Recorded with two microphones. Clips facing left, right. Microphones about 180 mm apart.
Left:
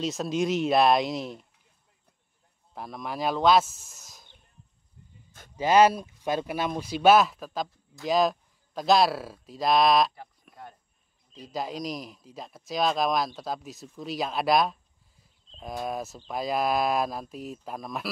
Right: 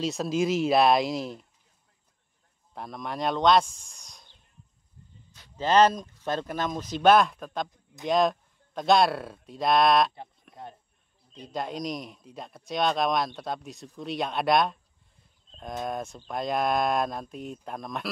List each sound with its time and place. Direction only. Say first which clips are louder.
0.0 s speech: right 1 dB; centre (ahead or behind)
2.7 s speech: even; centre (ahead or behind)
5.6 s speech: left 1 dB; 10° left (ahead or behind)
7.7 s speech: even; 20° right (ahead or behind)
8.1 s speech: even; centre (ahead or behind)
10.5 s a sound: right 3 dB; 25° right (ahead or behind)
11.3 s speech: even; centre (ahead or behind)
15.8 s speech: even; 5° left (ahead or behind)